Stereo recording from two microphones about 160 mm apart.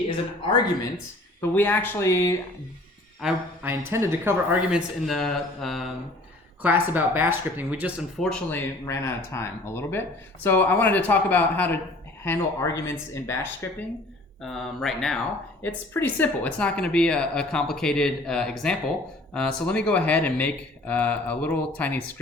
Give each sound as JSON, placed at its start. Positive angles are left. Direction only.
{"t": 1.4, "sound": "speech", "side_deg": 10}
{"t": 3.2, "sound": "speech", "side_deg": -5}
{"t": 3.7, "sound": "speech", "side_deg": -15}
{"t": 4.7, "sound": "speech", "side_deg": 0}
{"t": 6.6, "sound": "speech", "side_deg": -10}
{"t": 8.2, "sound": "speech", "side_deg": 5}
{"t": 14.4, "sound": "speech", "side_deg": 0}
{"t": 15.6, "sound": "speech", "side_deg": 10}